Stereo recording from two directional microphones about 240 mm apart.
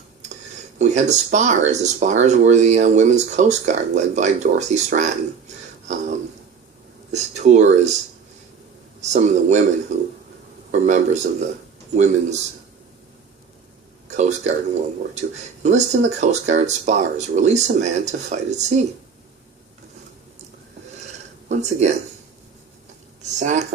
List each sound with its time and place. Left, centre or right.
0.8 s speech: right
7.1 s speech: right
9.0 s speech: right
14.1 s speech: right
21.0 s a sound: right
23.4 s speech: right